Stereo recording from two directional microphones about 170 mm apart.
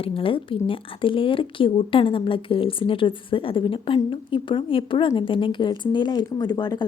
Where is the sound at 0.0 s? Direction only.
30° left (ahead or behind).